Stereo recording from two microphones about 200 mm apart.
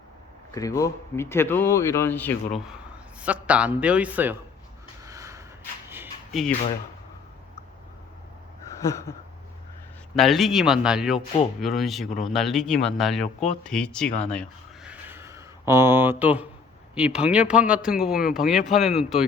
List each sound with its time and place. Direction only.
0.5 s speech: 15° left (ahead or behind)
2.6 s a man's voice: 5° right (ahead or behind)
5.0 s a sound: 15° right (ahead or behind)
6.3 s speech: centre (ahead or behind)
8.8 s speech: 15° left (ahead or behind)
10.2 s speech: centre (ahead or behind)
14.8 s a sound: 10° right (ahead or behind)
16.9 s speech: 5° right (ahead or behind)